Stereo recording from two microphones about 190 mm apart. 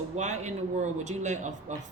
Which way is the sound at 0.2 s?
35° right (ahead or behind).